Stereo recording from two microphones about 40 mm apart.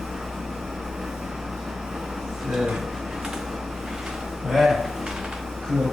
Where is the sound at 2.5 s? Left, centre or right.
Centre.